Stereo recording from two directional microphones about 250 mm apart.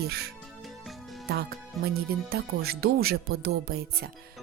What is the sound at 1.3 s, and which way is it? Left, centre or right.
Speech, right.